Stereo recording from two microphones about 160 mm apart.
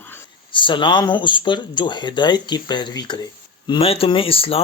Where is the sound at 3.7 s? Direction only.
35° left (ahead or behind).